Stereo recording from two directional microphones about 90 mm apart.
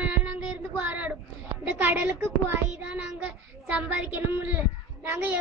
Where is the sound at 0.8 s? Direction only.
15° right (ahead or behind).